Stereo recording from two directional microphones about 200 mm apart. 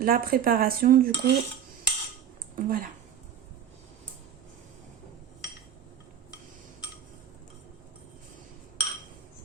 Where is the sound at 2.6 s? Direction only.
45° right (ahead or behind).